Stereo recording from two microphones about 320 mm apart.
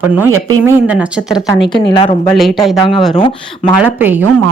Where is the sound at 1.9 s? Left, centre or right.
Centre.